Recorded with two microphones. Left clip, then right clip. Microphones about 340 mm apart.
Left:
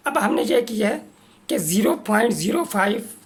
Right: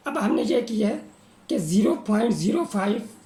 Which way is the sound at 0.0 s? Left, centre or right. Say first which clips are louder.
Left 4 dB; left.